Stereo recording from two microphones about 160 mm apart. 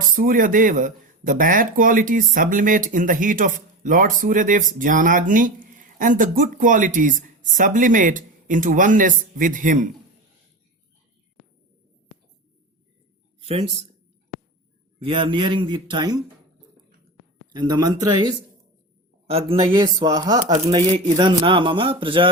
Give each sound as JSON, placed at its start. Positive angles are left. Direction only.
{"t": 0.2, "sound": "speech", "side_deg": -55}
{"t": 13.4, "sound": "speech", "side_deg": -35}
{"t": 14.9, "sound": "a man's voice", "side_deg": -35}
{"t": 17.5, "sound": "a man's voice", "side_deg": -25}
{"t": 19.3, "sound": "speech", "side_deg": -35}
{"t": 19.7, "sound": "a man's voice", "side_deg": -25}